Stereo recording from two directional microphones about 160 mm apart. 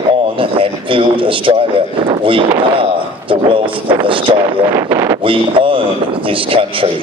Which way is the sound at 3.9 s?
30° right (ahead or behind).